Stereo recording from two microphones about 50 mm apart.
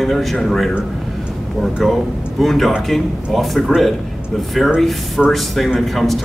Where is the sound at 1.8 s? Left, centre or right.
Centre.